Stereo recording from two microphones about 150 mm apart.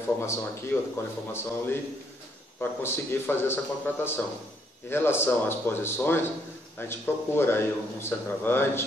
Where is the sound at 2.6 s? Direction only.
15° left (ahead or behind).